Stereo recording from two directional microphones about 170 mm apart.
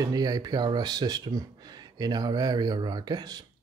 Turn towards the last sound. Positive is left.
turn(degrees=-25)  # may be behind; listen again after turning